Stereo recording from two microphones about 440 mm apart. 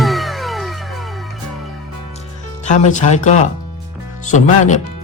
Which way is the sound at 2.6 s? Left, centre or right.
Centre.